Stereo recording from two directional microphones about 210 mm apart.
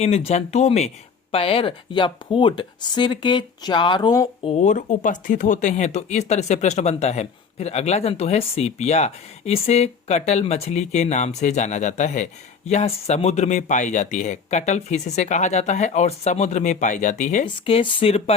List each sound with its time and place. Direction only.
0.0 s speech: 30° left (ahead or behind)
4.4 s speech: 30° left (ahead or behind)